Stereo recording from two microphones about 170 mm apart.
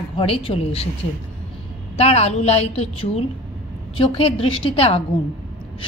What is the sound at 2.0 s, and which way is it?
A woman's voice, 40° left (ahead or behind).